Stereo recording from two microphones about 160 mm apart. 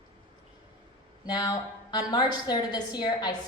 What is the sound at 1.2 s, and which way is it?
A woman's voice, 25° left (ahead or behind).